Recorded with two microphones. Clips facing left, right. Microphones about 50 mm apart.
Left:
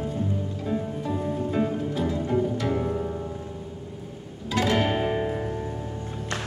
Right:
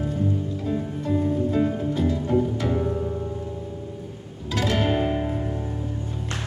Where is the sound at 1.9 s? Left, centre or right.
Centre.